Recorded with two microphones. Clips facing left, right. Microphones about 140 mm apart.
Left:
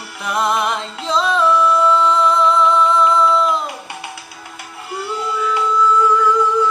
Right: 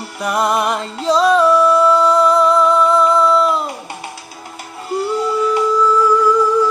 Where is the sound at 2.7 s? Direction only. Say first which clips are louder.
Right 2 dB; 10° right (ahead or behind).